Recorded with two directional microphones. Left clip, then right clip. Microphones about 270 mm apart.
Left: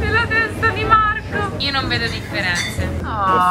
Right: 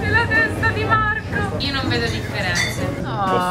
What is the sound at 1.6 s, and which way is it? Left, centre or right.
Speech, centre.